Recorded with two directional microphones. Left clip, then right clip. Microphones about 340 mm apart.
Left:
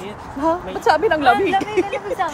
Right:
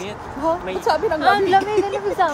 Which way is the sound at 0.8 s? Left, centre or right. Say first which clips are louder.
Left 4 dB; left.